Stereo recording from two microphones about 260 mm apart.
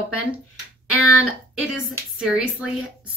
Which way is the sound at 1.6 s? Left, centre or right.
Centre.